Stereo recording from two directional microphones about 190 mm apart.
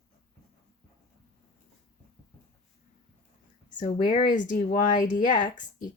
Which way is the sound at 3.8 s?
40° left (ahead or behind).